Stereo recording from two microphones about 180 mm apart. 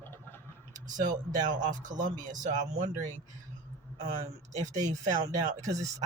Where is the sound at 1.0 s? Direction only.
45° right (ahead or behind).